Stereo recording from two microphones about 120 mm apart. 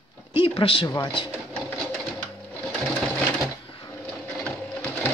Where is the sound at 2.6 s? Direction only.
10° left (ahead or behind).